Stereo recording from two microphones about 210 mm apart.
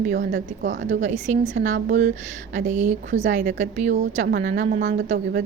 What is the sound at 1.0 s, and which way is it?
Speech, 35° right (ahead or behind).